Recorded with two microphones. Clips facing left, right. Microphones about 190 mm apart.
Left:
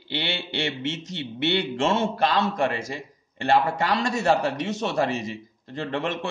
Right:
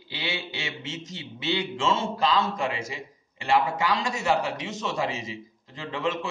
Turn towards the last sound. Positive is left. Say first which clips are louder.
# left 2 dB
turn(degrees=65)  # may be behind; listen again after turning